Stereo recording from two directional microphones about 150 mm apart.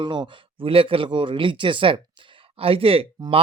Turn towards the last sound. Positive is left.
turn(degrees=-40)  # may be behind; listen again after turning